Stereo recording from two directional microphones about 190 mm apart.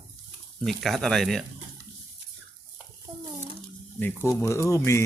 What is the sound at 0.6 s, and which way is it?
Speech, centre (ahead or behind).